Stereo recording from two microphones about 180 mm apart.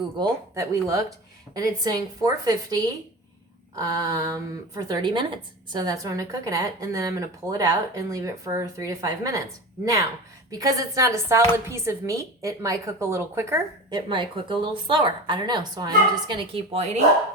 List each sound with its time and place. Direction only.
0.2 s a woman's voice: 15° right (ahead or behind)
10.5 s a woman's voice: 20° right (ahead or behind)
14.1 s a woman's voice: 25° right (ahead or behind)